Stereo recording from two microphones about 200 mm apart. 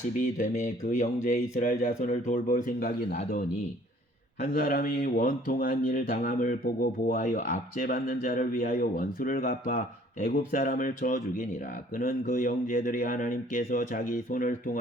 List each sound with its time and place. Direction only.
0.2 s speech: 40° left (ahead or behind)
4.5 s speech: 45° left (ahead or behind)